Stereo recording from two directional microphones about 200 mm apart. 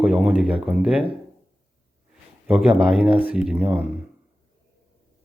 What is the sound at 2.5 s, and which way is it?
Speech, 5° right (ahead or behind).